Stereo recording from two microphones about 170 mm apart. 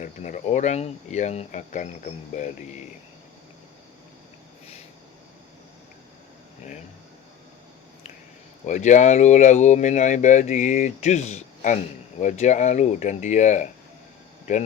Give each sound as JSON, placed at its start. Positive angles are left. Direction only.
{"t": 0.0, "sound": "speech", "side_deg": 45}
{"t": 8.6, "sound": "speech", "side_deg": 45}